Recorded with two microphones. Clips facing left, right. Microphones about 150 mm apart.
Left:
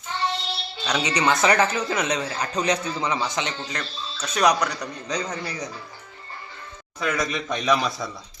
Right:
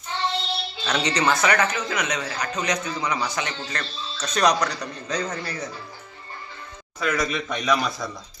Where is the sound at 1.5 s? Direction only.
30° left (ahead or behind); by 5.7 s 15° left (ahead or behind).